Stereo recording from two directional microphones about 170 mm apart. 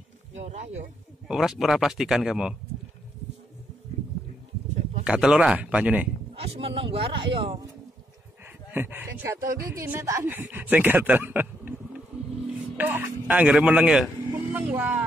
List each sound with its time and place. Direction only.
0.3 s speech: 40° right (ahead or behind)
1.2 s speech: centre (ahead or behind)
5.0 s speech: 5° right (ahead or behind)
6.3 s speech: 35° right (ahead or behind)
8.7 s speech: 10° right (ahead or behind)
12.7 s speech: 10° right (ahead or behind)